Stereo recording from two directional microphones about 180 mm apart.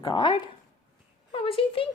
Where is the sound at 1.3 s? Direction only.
30° left (ahead or behind).